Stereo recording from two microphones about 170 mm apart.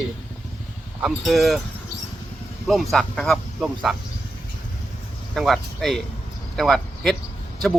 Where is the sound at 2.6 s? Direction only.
Centre (ahead or behind).